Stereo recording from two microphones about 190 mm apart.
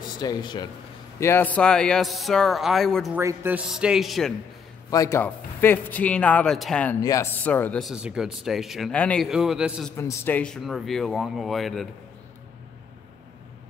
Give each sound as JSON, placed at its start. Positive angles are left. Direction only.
{"t": 0.2, "sound": "speech", "side_deg": 20}
{"t": 1.2, "sound": "speech", "side_deg": 10}
{"t": 3.2, "sound": "speech", "side_deg": -10}
{"t": 4.9, "sound": "speech", "side_deg": 15}
{"t": 7.0, "sound": "speech", "side_deg": 20}
{"t": 9.9, "sound": "speech", "side_deg": 15}